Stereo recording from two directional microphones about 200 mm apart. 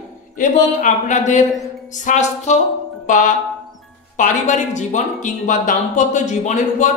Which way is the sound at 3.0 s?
40° left (ahead or behind).